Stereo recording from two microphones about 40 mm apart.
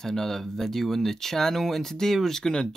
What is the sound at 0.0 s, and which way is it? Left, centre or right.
Speech, centre.